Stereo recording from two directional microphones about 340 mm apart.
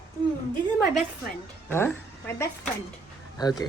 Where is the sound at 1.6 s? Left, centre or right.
Centre.